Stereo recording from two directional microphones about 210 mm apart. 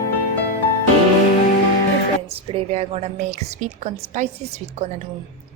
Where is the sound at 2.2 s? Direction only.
25° right (ahead or behind).